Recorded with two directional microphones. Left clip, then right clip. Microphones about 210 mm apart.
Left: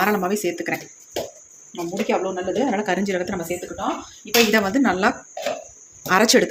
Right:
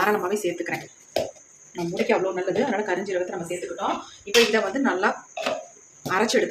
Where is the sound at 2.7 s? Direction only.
35° left (ahead or behind).